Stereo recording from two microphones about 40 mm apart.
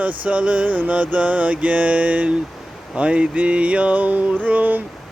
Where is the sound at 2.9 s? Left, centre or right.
Right.